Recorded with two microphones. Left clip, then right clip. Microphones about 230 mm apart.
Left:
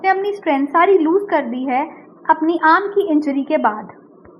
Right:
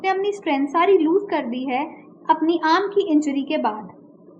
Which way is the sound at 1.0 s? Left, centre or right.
Centre.